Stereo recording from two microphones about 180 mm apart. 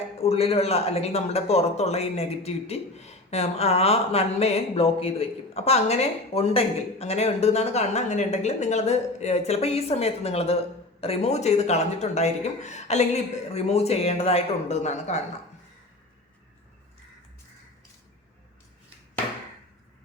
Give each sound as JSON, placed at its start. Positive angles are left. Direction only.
{"t": 0.2, "sound": "speech", "side_deg": 35}